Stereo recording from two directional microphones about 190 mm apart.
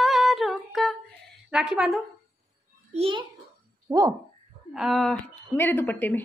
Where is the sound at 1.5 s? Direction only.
5° right (ahead or behind).